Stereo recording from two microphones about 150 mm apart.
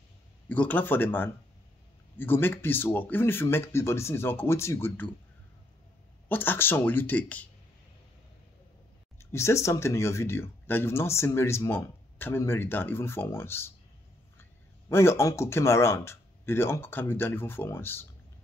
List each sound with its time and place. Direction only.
0.5 s speech: 10° left (ahead or behind)
6.2 s speech: 15° left (ahead or behind)
9.2 s speech: 20° left (ahead or behind)
14.9 s speech: 15° left (ahead or behind)